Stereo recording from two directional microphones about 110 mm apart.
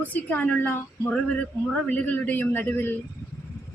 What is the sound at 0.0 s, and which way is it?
A man's voice, 15° left (ahead or behind).